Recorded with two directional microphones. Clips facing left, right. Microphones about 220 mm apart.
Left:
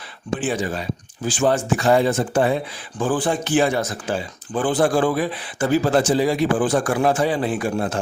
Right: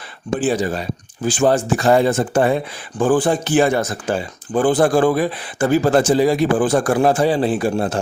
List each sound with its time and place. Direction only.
0.4 s speech: 35° right (ahead or behind)